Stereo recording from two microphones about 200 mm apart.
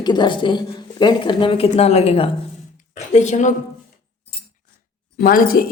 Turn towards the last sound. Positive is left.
turn(degrees=45)  # may be behind; listen again after turning